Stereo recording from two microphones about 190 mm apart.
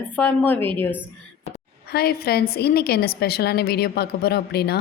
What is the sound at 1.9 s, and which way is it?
A woman's voice, 55° left (ahead or behind).